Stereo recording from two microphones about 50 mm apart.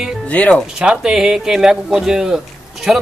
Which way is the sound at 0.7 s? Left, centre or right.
Centre.